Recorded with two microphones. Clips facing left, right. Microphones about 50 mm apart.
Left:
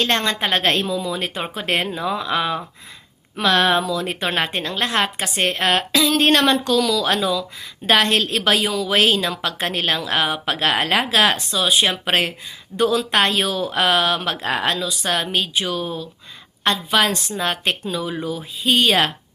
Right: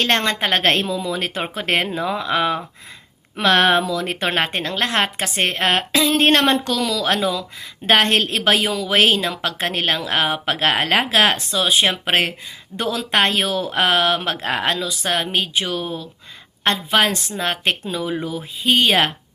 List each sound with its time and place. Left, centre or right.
0.0 s a woman's voice: right